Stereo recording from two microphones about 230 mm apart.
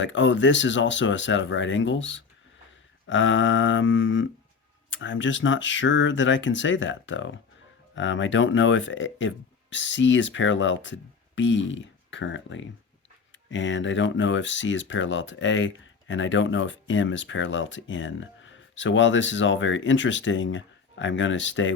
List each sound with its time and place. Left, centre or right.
0.0 s speech: left
3.1 s a sound: left
4.9 s speech: left